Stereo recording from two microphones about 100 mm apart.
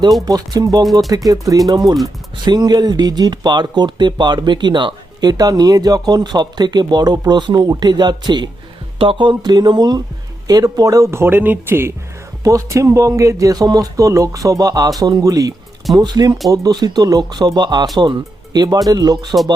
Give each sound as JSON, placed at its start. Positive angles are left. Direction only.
{"t": 0.3, "sound": "speech", "side_deg": -40}
{"t": 9.0, "sound": "speech", "side_deg": -60}